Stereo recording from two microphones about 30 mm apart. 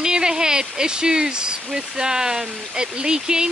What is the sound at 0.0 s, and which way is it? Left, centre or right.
Speech, right.